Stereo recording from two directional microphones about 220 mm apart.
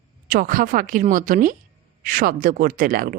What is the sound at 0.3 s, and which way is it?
Speech, 40° right (ahead or behind).